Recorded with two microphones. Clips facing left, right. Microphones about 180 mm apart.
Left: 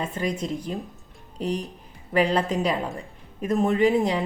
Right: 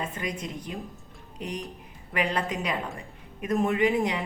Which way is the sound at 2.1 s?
30° left (ahead or behind).